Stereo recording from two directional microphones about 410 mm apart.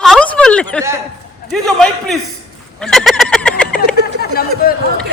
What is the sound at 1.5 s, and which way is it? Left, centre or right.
Speech, centre.